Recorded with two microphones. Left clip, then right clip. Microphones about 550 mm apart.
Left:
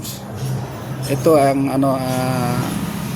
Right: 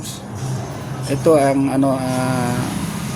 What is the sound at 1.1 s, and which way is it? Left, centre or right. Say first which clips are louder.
Speech: even; left.